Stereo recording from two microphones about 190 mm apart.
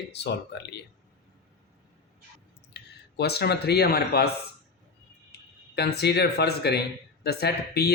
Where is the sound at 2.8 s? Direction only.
65° left (ahead or behind).